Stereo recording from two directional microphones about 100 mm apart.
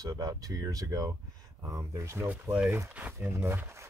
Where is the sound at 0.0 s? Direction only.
35° right (ahead or behind).